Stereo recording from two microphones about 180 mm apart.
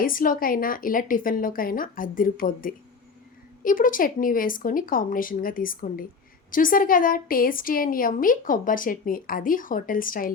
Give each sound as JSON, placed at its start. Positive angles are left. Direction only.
{"t": 0.0, "sound": "a woman's voice", "side_deg": 50}